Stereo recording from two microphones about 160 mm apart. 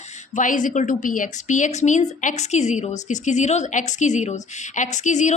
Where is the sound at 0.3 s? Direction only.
55° left (ahead or behind).